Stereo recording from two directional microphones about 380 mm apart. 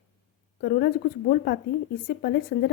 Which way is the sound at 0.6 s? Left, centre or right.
Left.